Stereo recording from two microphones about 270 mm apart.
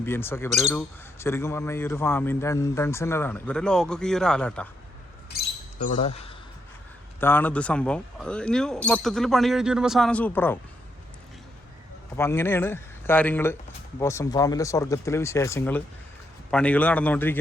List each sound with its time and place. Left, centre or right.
0.0 s a man's voice: centre
5.3 s basketball bounce: left
5.8 s speech: left
7.2 s speech: centre
12.1 s a man's voice: centre